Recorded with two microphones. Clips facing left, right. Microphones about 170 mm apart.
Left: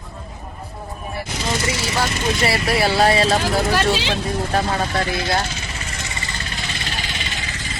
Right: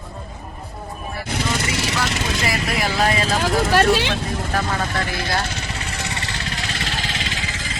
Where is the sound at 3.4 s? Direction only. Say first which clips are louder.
Right 2 dB; 55° right (ahead or behind).